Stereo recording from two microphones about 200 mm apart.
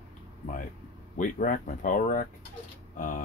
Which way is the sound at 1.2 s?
40° left (ahead or behind).